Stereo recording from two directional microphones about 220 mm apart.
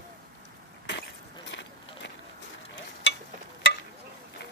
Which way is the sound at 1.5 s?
55° left (ahead or behind).